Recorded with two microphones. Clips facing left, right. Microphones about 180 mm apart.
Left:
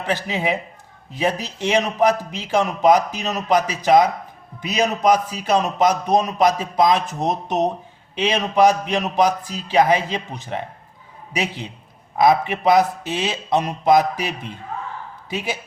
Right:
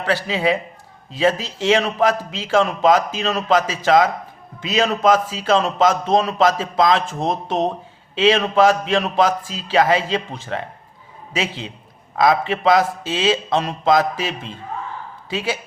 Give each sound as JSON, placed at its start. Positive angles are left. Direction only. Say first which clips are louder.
{"t": 0.0, "sound": "a man's voice", "louder": "right 3 dB", "side_deg": 20}
{"t": 12.1, "sound": "a man's voice", "louder": "left 1 dB", "side_deg": 20}